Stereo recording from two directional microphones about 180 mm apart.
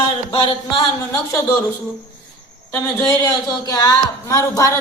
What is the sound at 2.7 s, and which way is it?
Speech, 15° left (ahead or behind).